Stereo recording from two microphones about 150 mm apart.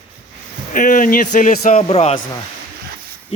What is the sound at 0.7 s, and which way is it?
A man's voice, 60° left (ahead or behind).